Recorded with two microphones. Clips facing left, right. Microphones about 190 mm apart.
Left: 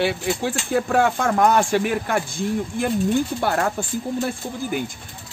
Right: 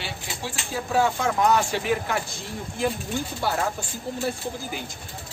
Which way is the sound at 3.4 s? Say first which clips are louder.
Left 4 dB; 60° left (ahead or behind).